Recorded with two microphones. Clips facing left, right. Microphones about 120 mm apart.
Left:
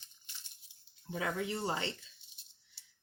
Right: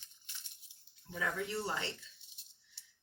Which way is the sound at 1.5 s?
20° left (ahead or behind).